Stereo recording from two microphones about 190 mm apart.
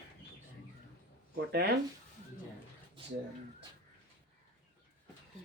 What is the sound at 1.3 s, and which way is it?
Speech, 55° right (ahead or behind).